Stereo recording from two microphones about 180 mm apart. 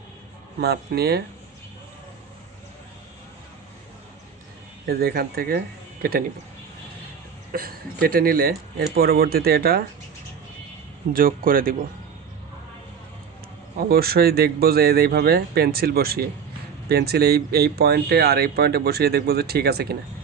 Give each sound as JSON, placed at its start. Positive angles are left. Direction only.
{"t": 0.6, "sound": "speech", "side_deg": -65}
{"t": 4.9, "sound": "speech", "side_deg": -55}
{"t": 7.5, "sound": "speech", "side_deg": -55}
{"t": 11.1, "sound": "speech", "side_deg": -50}
{"t": 13.7, "sound": "speech", "side_deg": -55}